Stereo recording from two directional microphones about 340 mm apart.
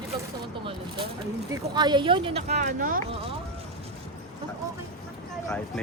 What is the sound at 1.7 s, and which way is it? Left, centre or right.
Speech, centre.